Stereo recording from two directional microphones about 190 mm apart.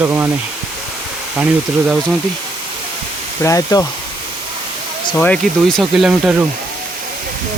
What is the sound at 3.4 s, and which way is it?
Speech, 15° left (ahead or behind).